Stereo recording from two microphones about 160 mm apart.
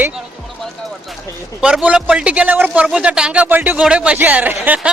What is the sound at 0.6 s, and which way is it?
Music, centre (ahead or behind).